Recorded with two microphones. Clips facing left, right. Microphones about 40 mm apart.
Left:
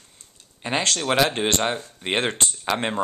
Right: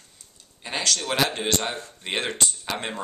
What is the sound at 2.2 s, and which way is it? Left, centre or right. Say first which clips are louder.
Speech: left 2 dB; left.